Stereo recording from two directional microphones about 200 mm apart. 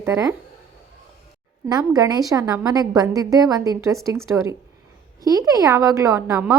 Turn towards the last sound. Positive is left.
turn(degrees=-15)  # may be behind; listen again after turning